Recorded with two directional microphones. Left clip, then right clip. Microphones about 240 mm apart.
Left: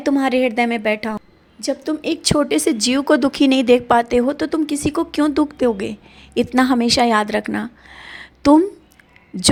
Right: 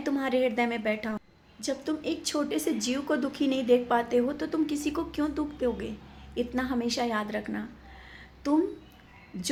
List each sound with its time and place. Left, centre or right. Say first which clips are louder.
0.0 s a woman's voice: left 10 dB; left